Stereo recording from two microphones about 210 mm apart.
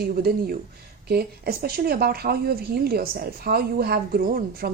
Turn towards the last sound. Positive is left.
turn(degrees=-45)  # may be behind; listen again after turning